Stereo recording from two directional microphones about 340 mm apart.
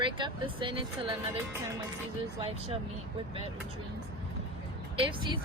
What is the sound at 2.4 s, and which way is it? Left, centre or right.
Speech, centre.